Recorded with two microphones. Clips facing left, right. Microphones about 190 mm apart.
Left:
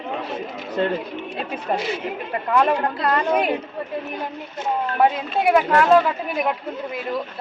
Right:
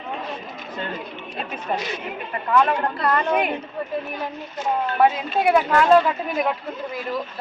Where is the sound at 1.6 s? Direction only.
30° left (ahead or behind).